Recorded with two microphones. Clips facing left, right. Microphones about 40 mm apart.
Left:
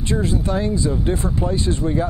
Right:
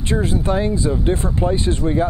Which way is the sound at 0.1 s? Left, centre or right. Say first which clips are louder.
Right 2 dB; right.